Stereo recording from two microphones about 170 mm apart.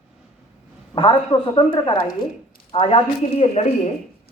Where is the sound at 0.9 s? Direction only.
30° left (ahead or behind).